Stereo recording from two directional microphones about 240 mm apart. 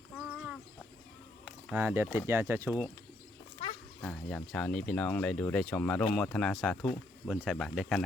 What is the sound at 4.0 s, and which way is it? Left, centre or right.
Speech, centre.